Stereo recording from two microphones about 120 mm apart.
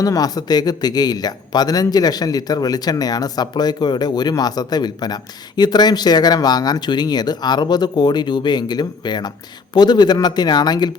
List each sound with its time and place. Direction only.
0.0 s speech: 30° left (ahead or behind)